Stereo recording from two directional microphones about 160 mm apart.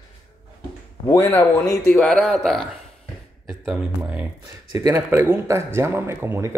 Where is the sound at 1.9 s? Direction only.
5° left (ahead or behind).